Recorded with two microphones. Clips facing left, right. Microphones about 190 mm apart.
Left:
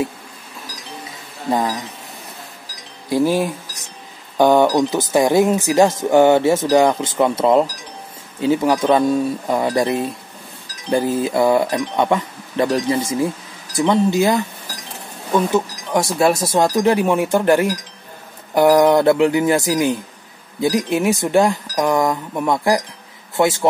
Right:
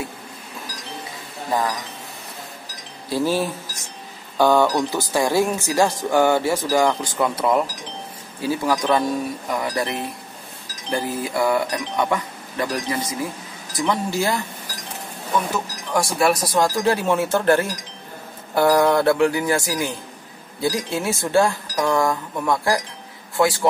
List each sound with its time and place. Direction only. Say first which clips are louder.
1.5 s speech: left 3 dB; 20° left (ahead or behind)
3.1 s speech: left 4 dB; 15° left (ahead or behind)
15.5 s a man's voice: left 5 dB; 20° left (ahead or behind)